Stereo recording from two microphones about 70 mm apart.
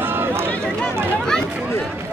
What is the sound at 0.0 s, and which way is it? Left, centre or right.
Run, right.